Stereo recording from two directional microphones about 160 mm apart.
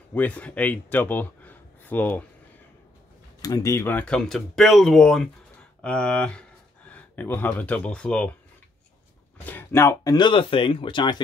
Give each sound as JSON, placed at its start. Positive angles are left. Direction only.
{"t": 0.1, "sound": "speech", "side_deg": 10}
{"t": 3.4, "sound": "speech", "side_deg": 20}
{"t": 9.5, "sound": "speech", "side_deg": 15}
{"t": 10.1, "sound": "speech", "side_deg": 30}